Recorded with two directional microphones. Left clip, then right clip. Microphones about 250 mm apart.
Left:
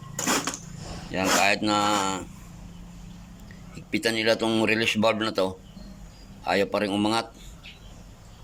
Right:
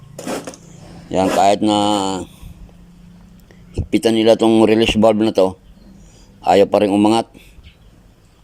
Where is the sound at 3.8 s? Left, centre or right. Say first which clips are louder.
Right 10 dB; right.